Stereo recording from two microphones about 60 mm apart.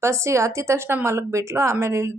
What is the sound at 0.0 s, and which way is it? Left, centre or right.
Speech, right.